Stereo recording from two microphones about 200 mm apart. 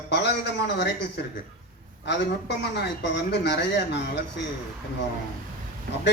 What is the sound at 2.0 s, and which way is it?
Speech, 60° left (ahead or behind).